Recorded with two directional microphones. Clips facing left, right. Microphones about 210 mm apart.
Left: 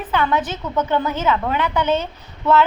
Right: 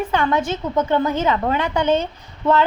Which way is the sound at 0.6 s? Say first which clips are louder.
Right 2 dB; 30° right (ahead or behind).